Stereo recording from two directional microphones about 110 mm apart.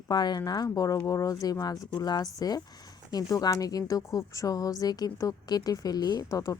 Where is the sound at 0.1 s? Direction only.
40° left (ahead or behind).